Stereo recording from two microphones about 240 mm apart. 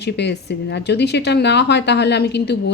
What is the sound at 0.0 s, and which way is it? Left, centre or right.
A woman's voice, left.